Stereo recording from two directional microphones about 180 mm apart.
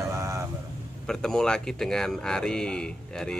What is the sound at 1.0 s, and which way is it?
Speech, 5° left (ahead or behind).